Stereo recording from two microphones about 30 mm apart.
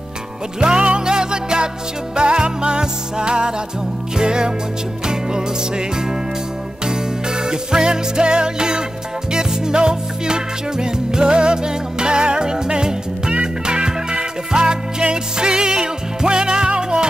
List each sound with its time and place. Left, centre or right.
0.6 s music: right